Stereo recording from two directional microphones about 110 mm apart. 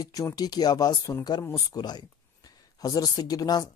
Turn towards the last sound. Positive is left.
turn(degrees=35)  # may be behind; listen again after turning